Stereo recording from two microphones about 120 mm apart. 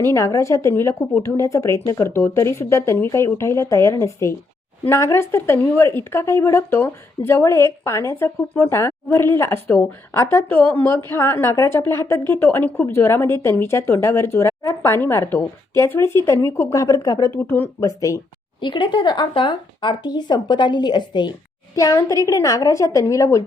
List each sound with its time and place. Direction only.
0.0 s a woman's voice: 25° left (ahead or behind)
17.3 s a woman's voice: 15° left (ahead or behind)
18.6 s a woman's voice: 40° left (ahead or behind)